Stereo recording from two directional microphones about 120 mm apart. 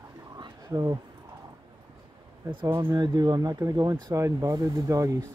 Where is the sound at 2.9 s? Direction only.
35° right (ahead or behind).